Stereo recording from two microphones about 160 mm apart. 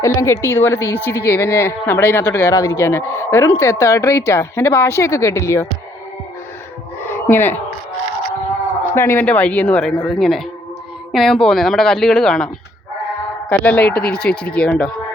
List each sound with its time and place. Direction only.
0.0 s a woman's voice: 20° left (ahead or behind)
7.1 s speech: 15° left (ahead or behind)
9.0 s speech: 15° left (ahead or behind)
13.5 s speech: 10° left (ahead or behind)
14.0 s speech: 75° left (ahead or behind)
14.3 s speech: 5° left (ahead or behind)